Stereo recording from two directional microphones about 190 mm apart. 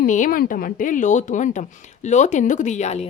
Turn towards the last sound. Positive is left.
turn(degrees=35)  # may be behind; listen again after turning